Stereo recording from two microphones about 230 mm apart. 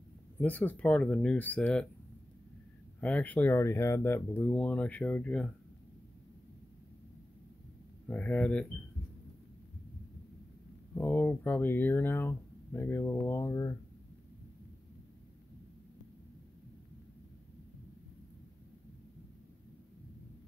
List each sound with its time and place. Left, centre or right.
0.4 s speech: centre
3.0 s speech: centre
8.1 s speech: centre
11.0 s speech: centre